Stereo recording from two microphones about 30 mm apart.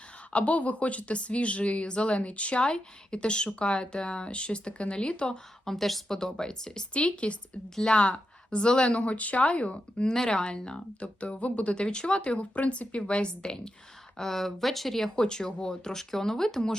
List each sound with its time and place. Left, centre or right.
0.3 s speech: left
5.6 s speech: centre
6.1 s speech: centre
6.9 s speech: left
9.7 s speech: left
11.0 s speech: left
11.7 s speech: left
13.0 s speech: left
14.2 s speech: centre
15.1 s speech: left